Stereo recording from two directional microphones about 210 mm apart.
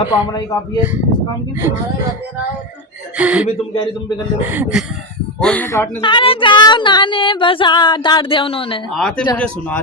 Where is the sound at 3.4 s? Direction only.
25° left (ahead or behind).